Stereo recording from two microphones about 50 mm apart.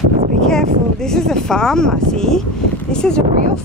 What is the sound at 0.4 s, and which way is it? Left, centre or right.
Speech, centre.